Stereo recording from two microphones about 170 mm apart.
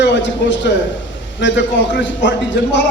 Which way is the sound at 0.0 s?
90° left.